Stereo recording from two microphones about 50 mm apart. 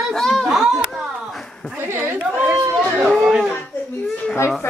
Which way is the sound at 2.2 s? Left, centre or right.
Right.